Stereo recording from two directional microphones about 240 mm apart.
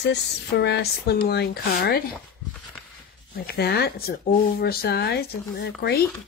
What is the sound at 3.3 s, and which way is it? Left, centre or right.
Speech, left.